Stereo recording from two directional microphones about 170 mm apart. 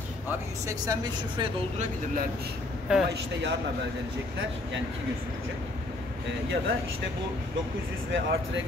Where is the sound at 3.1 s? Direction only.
85° right.